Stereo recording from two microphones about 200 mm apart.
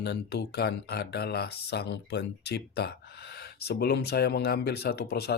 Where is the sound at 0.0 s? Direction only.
55° left (ahead or behind).